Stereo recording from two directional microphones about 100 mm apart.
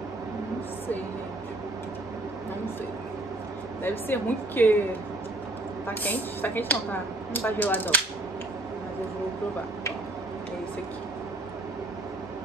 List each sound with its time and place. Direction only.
4.1 s speech: 20° left (ahead or behind)
5.9 s speech: 20° left (ahead or behind)